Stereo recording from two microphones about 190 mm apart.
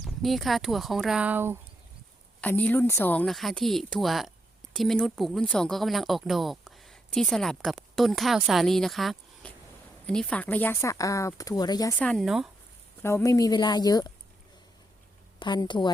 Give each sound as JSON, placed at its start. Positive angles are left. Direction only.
{"t": 0.0, "sound": "speech", "side_deg": 0}
{"t": 2.4, "sound": "speech", "side_deg": 10}
{"t": 11.9, "sound": "speech", "side_deg": 5}
{"t": 13.0, "sound": "a woman's voice", "side_deg": 10}
{"t": 15.4, "sound": "a woman's voice", "side_deg": 25}